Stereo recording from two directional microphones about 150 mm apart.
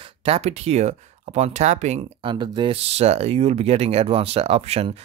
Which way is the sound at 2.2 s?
30° right (ahead or behind).